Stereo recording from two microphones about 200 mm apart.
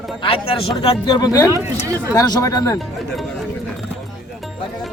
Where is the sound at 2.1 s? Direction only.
20° left (ahead or behind).